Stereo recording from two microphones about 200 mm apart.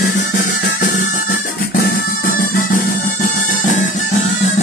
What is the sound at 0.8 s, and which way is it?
Music, 40° left (ahead or behind).